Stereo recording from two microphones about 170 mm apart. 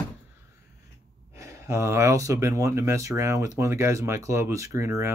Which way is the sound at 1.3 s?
15° right (ahead or behind).